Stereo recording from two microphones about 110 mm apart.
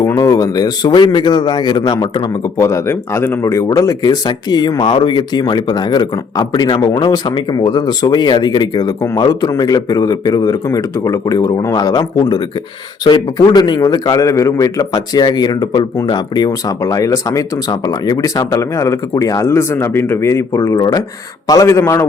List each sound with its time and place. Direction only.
0.0 s a man's voice: 35° left (ahead or behind)
13.1 s a man's voice: 40° left (ahead or behind)